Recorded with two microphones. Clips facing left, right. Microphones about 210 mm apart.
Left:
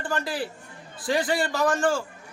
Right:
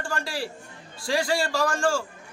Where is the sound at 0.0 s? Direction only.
20° left (ahead or behind).